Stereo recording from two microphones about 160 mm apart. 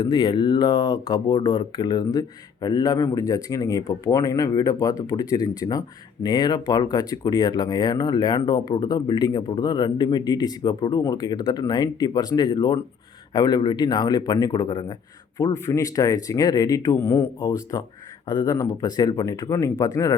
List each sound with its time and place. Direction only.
0.0 s speech: 25° left (ahead or behind)